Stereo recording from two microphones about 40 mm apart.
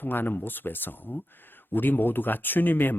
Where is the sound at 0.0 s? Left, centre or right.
Left.